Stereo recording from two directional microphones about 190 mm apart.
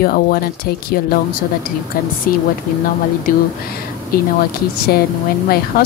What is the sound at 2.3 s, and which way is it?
Speech, 50° left (ahead or behind).